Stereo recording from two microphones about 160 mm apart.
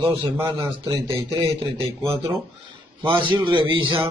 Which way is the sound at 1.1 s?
35° right (ahead or behind).